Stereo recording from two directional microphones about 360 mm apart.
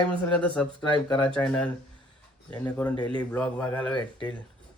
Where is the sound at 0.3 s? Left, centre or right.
Centre.